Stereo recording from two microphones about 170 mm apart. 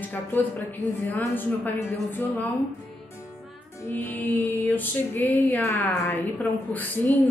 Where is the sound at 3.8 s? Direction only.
10° left (ahead or behind).